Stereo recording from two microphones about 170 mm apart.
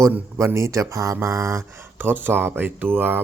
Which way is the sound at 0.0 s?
15° right (ahead or behind).